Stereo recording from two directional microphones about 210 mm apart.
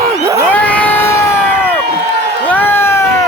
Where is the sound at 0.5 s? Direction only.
5° left (ahead or behind).